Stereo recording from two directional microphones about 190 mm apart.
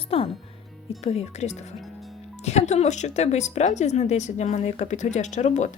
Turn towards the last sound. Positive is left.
turn(degrees=40)  # may be behind; listen again after turning